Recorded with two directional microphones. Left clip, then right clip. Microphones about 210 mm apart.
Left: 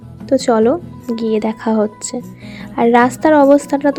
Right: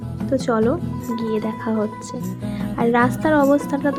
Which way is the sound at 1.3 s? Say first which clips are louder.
Left 8 dB; 30° left (ahead or behind).